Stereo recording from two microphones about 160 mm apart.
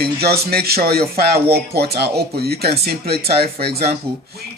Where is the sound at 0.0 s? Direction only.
80° right.